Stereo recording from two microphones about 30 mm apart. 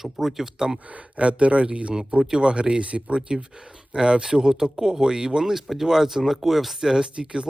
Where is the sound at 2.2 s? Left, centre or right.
Right.